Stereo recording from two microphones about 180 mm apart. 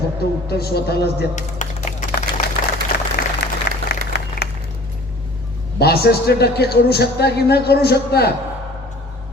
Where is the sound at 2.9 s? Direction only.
65° left (ahead or behind).